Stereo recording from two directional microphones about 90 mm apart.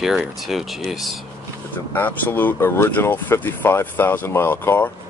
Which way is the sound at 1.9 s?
20° left (ahead or behind).